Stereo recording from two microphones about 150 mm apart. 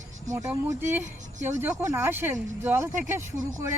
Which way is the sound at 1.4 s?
55° right (ahead or behind).